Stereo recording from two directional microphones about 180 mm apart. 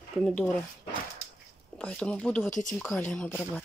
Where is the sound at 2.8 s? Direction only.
10° left (ahead or behind).